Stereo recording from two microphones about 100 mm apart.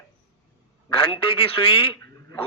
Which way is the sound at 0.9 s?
65° left (ahead or behind).